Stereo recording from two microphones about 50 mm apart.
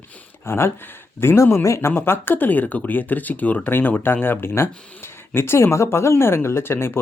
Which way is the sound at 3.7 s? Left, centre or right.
Left.